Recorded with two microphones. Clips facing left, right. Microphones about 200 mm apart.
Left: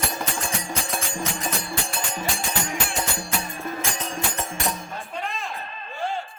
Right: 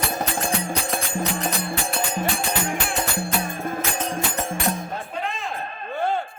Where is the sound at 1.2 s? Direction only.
60° right (ahead or behind).